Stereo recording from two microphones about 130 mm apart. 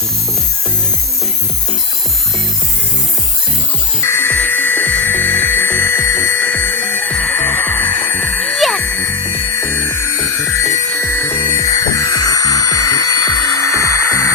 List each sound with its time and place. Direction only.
4.0 s music: 20° left (ahead or behind); by 8.8 s centre (ahead or behind)
8.8 s music: 15° left (ahead or behind)